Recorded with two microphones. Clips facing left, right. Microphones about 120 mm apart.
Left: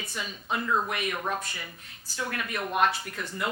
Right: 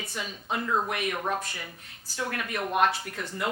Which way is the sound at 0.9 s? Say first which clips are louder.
Right 1 dB; 50° right (ahead or behind).